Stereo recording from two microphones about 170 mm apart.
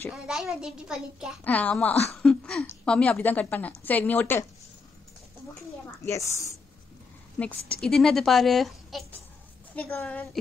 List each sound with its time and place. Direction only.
0.1 s speech: centre (ahead or behind)
1.4 s a woman's voice: 10° left (ahead or behind)
2.1 s a sound: 5° left (ahead or behind)
2.7 s a woman's voice: 5° left (ahead or behind)
6.0 s a woman's voice: 15° left (ahead or behind)
7.3 s a woman's voice: 5° left (ahead or behind)